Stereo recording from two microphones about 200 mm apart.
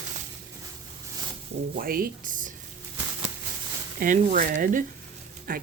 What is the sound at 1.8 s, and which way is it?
Speech, 45° right (ahead or behind).